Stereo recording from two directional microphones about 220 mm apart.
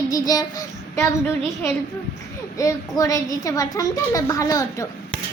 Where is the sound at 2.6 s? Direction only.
15° left (ahead or behind).